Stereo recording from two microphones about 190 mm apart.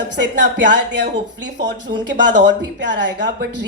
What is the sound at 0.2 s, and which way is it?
Speech, 70° right (ahead or behind).